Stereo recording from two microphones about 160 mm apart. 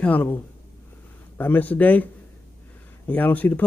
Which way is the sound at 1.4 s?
10° left (ahead or behind).